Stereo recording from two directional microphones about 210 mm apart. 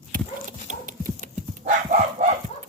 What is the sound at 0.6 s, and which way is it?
Dog, 35° right (ahead or behind).